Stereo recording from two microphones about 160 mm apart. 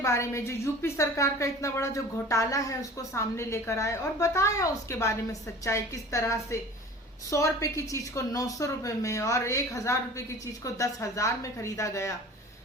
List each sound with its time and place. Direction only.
0.0 s a woman's voice: 20° left (ahead or behind)